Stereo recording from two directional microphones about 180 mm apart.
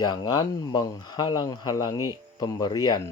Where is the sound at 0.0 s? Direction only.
25° left (ahead or behind).